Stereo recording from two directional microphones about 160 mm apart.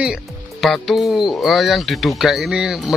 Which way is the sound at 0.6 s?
Centre (ahead or behind).